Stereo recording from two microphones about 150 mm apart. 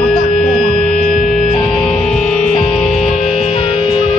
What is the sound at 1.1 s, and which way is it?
Music, centre (ahead or behind).